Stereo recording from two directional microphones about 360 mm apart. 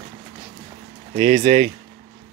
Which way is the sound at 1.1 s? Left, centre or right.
Centre.